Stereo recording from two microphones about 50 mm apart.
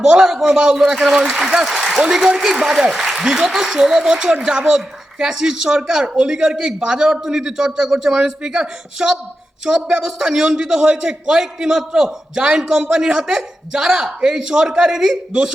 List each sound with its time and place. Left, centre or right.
0.0 s speech: centre